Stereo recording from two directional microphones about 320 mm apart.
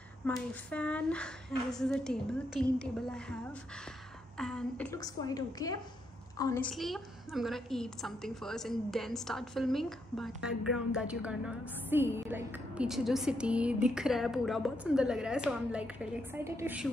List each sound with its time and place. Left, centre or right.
0.2 s a woman's voice: centre
4.4 s a woman's voice: centre